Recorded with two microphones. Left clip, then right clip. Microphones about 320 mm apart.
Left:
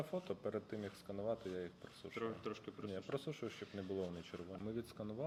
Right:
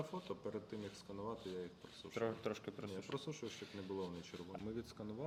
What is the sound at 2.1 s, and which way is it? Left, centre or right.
Speech, right.